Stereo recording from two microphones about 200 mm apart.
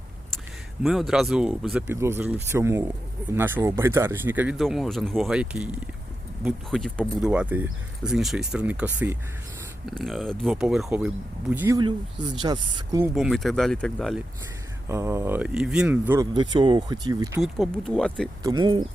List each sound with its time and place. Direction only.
0.8 s speech: centre (ahead or behind)
11.8 s speech: 25° right (ahead or behind)
13.1 s speech: centre (ahead or behind)
14.8 s speech: 15° right (ahead or behind)
17.4 s speech: centre (ahead or behind)
18.4 s speech: 20° right (ahead or behind)